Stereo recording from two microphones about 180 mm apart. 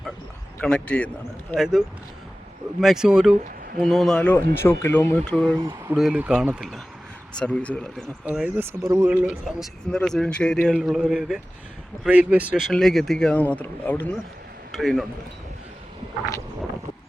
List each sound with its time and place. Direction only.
0.6 s a man's voice: 5° left (ahead or behind)
2.8 s speech: centre (ahead or behind)
5.5 s speech: 20° right (ahead or behind)
5.9 s speech: 5° right (ahead or behind)
8.2 s speech: 5° right (ahead or behind)